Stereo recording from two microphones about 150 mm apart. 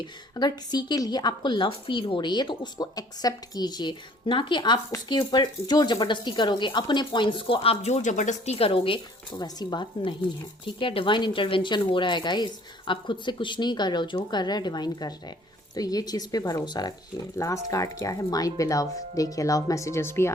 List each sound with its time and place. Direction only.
0.0 s a woman's voice: 30° left (ahead or behind)